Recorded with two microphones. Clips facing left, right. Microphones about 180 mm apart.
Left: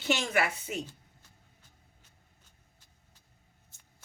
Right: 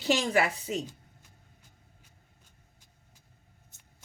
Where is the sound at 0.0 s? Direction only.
35° right (ahead or behind).